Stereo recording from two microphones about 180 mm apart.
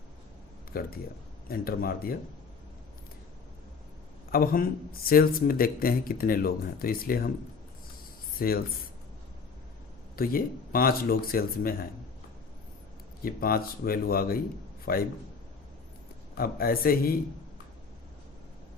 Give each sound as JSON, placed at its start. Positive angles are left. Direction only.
{"t": 0.7, "sound": "speech", "side_deg": 55}
{"t": 4.3, "sound": "speech", "side_deg": 55}
{"t": 8.4, "sound": "speech", "side_deg": 55}
{"t": 10.2, "sound": "speech", "side_deg": 55}
{"t": 13.2, "sound": "speech", "side_deg": 55}
{"t": 16.4, "sound": "speech", "side_deg": 55}